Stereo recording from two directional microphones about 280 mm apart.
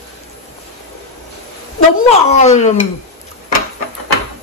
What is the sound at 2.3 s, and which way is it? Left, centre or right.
Speech, left.